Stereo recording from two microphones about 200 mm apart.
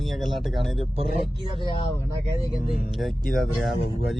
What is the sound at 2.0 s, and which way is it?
Speech, 20° left (ahead or behind).